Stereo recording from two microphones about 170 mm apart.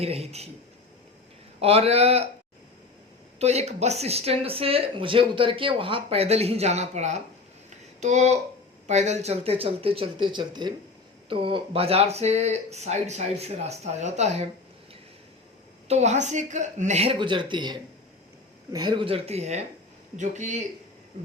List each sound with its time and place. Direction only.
0.0 s speech: 35° right (ahead or behind)
1.6 s speech: 35° right (ahead or behind)
3.3 s speech: 40° right (ahead or behind)
7.7 s a sound: 40° right (ahead or behind)
8.9 s speech: 40° right (ahead or behind)
15.9 s speech: 40° right (ahead or behind)